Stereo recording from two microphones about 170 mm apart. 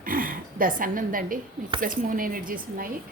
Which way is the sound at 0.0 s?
55° right (ahead or behind).